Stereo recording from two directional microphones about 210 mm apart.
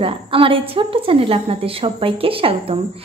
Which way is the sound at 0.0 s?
25° right (ahead or behind).